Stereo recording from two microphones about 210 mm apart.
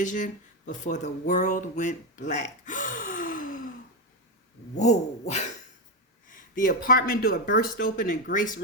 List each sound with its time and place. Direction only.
0.0 s speech: 35° left (ahead or behind)
4.8 s speech: 35° left (ahead or behind)
6.2 s a sound: 40° left (ahead or behind)
6.8 s speech: 45° left (ahead or behind)